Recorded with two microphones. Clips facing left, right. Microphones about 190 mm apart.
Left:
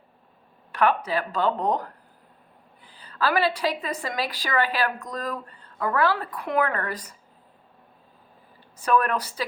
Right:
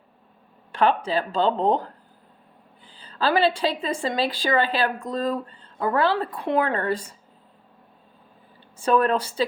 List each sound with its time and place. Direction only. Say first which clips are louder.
0.7 s speech: right 2 dB; 25° right (ahead or behind)
8.8 s speech: right 3 dB; 25° right (ahead or behind)